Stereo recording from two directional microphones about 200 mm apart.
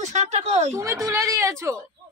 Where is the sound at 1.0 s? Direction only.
15° right (ahead or behind).